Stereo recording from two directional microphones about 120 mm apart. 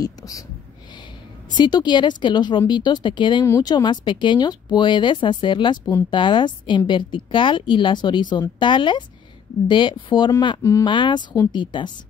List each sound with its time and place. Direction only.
0.0 s speech: 30° left (ahead or behind)
1.5 s a woman's voice: 35° left (ahead or behind)
3.4 s speech: 25° left (ahead or behind)
3.7 s a woman's voice: 40° left (ahead or behind)
10.6 s speech: 25° left (ahead or behind)
10.9 s a woman's voice: 40° left (ahead or behind)